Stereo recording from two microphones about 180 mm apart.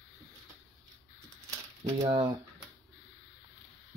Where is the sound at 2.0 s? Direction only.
30° right (ahead or behind).